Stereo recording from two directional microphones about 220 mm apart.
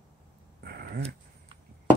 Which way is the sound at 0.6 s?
45° right (ahead or behind).